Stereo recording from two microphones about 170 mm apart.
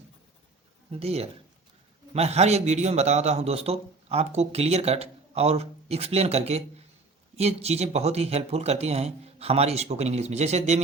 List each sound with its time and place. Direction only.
0.9 s a man's voice: 35° right (ahead or behind)